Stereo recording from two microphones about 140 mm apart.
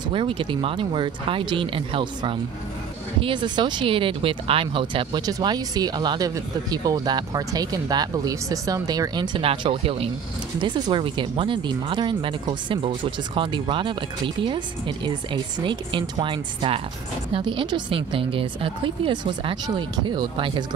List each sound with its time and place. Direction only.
0.1 s speech: 35° right (ahead or behind)